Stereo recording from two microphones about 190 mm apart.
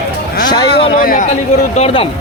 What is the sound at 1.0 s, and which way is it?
Speech, 50° left (ahead or behind).